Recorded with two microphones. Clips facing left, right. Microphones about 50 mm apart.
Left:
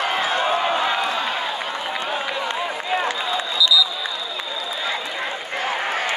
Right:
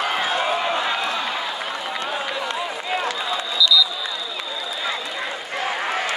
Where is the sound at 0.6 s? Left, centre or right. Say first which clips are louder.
Left 2 dB; left.